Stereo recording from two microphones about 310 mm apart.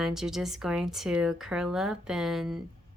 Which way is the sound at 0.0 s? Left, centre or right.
Centre.